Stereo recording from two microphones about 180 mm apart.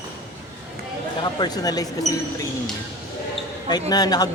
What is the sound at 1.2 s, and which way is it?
Speech, 20° left (ahead or behind).